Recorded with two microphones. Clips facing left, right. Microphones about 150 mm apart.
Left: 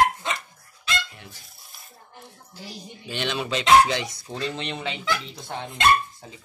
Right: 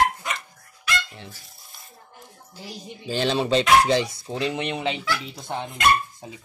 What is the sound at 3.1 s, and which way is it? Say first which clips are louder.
Speech: right 6 dB; 35° right (ahead or behind).